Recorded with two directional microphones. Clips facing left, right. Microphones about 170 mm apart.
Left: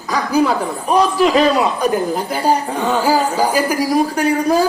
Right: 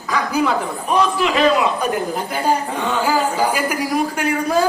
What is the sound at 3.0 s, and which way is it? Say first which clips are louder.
A woman's voice: left 1 dB; 35° left (ahead or behind).